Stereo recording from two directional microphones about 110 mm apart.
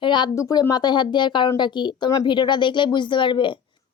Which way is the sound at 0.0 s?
45° left (ahead or behind).